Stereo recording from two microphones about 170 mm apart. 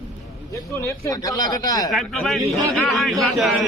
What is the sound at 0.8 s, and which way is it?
A man's voice, 20° left (ahead or behind).